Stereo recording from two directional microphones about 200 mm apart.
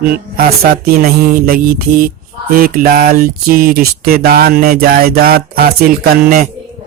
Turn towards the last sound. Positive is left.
turn(degrees=-45)  # may be behind; listen again after turning